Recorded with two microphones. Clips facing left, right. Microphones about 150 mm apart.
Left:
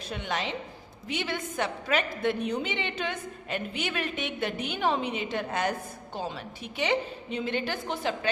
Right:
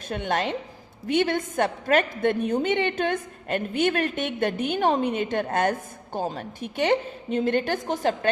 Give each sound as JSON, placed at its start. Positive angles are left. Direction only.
{"t": 0.1, "sound": "a woman's voice", "side_deg": -50}